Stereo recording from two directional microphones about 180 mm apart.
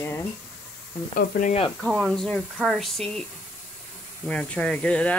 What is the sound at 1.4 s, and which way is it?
Speech, 35° left (ahead or behind).